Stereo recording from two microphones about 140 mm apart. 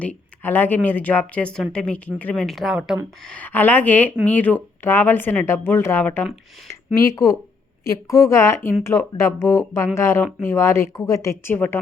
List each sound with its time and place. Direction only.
0.0 s a woman's voice: 10° left (ahead or behind)
3.2 s speech: 10° left (ahead or behind)